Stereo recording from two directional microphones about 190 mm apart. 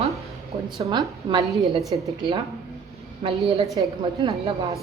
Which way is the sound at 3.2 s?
30° right (ahead or behind).